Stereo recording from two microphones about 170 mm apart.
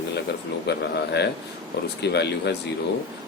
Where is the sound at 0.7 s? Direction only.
80° left.